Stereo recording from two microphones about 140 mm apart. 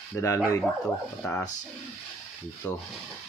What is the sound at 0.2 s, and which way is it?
Speech, 20° left (ahead or behind).